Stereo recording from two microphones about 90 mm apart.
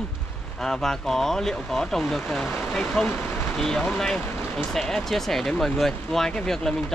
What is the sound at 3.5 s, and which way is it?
Speech, 5° left (ahead or behind).